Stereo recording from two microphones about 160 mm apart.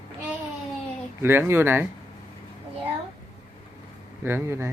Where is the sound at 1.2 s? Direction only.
15° right (ahead or behind).